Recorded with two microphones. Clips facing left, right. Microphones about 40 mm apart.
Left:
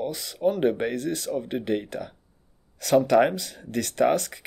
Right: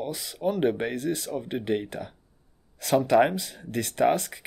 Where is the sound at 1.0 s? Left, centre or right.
Right.